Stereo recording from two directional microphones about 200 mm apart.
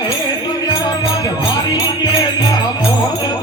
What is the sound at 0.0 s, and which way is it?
Music, 20° left (ahead or behind).